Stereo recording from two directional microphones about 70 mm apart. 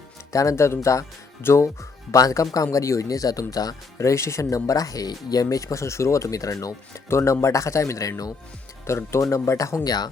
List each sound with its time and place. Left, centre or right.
0.3 s speech: left
3.9 s speech: left
7.1 s speech: left
8.9 s speech: left
9.8 s speech: left